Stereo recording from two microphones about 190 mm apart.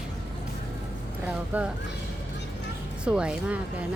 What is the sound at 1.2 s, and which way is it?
Speech, 5° right (ahead or behind).